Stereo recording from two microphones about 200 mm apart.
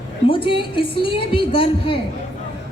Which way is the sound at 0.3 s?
25° left (ahead or behind).